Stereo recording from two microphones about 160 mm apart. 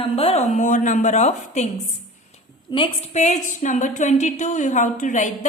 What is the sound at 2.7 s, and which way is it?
Speech, 30° left (ahead or behind).